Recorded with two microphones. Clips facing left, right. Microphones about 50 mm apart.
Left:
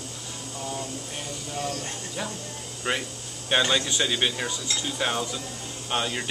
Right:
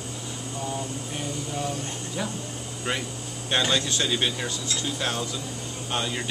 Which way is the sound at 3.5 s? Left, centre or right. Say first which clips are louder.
Left 1 dB; centre.